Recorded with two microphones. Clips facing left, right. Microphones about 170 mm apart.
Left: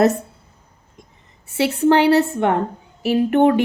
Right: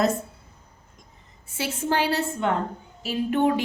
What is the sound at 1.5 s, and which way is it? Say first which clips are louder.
A woman's voice: left 11 dB; 70° left (ahead or behind).